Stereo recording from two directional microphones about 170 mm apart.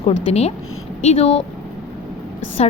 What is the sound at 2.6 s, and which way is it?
Speech, 35° left (ahead or behind).